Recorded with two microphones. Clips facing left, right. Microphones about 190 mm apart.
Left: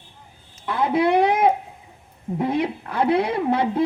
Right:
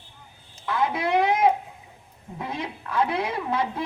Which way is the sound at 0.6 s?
30° left (ahead or behind).